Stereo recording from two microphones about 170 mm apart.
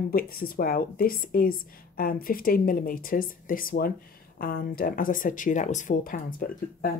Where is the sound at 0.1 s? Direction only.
60° left (ahead or behind).